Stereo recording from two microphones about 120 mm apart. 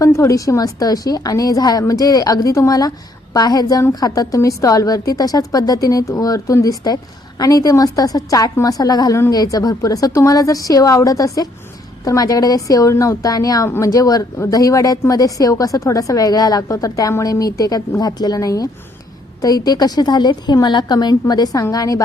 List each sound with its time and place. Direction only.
0.0 s a woman's voice: 25° left (ahead or behind)